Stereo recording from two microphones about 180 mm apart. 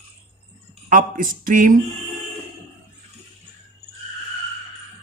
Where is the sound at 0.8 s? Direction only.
50° right (ahead or behind).